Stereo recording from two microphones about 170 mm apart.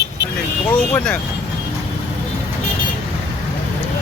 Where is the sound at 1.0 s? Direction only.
5° left (ahead or behind).